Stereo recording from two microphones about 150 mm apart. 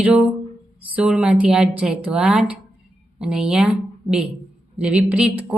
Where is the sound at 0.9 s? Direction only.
5° right (ahead or behind).